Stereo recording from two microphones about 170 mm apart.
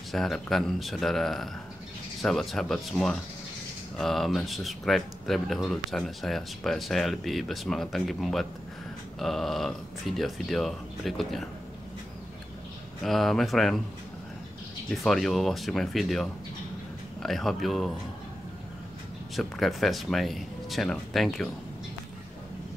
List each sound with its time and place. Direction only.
0.1 s speech: centre (ahead or behind)
13.0 s speech: centre (ahead or behind)
14.9 s speech: centre (ahead or behind)
19.3 s speech: centre (ahead or behind)